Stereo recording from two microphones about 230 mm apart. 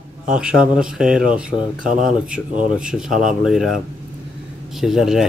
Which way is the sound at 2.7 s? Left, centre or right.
Centre.